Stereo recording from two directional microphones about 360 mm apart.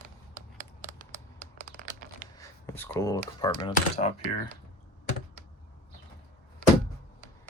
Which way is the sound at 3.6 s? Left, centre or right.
Centre.